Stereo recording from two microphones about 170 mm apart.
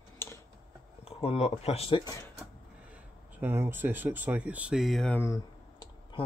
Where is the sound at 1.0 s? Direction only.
35° left (ahead or behind).